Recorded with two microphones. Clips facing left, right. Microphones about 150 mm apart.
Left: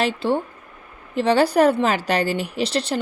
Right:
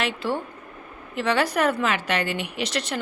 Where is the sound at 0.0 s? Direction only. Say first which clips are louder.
Left 5 dB; 30° left (ahead or behind).